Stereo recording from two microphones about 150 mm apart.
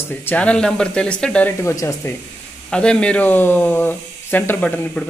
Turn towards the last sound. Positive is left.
turn(degrees=10)  # may be behind; listen again after turning